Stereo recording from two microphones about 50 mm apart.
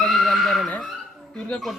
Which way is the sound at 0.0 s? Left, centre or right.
Centre.